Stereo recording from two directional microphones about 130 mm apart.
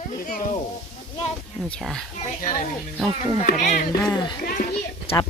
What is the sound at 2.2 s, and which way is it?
Speech, 80° left.